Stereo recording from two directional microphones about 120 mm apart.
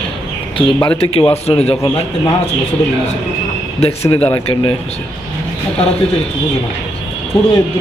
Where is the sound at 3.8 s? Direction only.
55° left (ahead or behind).